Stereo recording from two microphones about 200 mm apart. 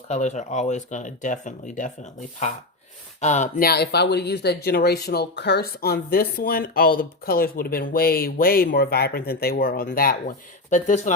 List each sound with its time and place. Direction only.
0.1 s speech: 35° left (ahead or behind)